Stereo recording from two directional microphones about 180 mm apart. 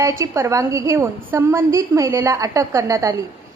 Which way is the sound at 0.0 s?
15° right (ahead or behind).